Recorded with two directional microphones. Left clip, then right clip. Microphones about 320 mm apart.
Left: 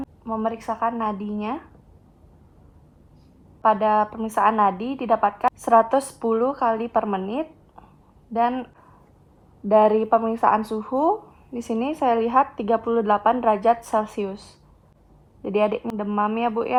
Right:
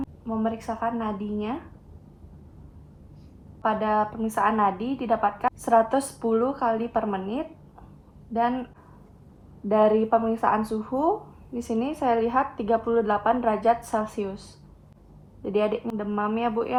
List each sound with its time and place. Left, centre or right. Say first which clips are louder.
0.3 s a woman's voice: left 4 dB; left
3.6 s a woman's voice: left 5 dB; left
9.6 s a woman's voice: left 4 dB; left
15.4 s a woman's voice: left 3 dB; left